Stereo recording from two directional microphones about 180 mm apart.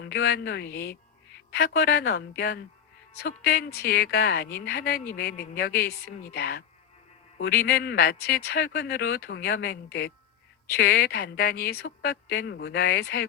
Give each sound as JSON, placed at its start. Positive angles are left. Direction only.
{"t": 0.0, "sound": "a woman's voice", "side_deg": 65}